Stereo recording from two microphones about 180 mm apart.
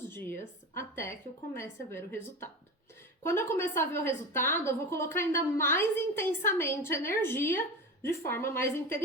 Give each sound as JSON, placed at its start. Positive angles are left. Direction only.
{"t": 0.7, "sound": "a woman's voice", "side_deg": 15}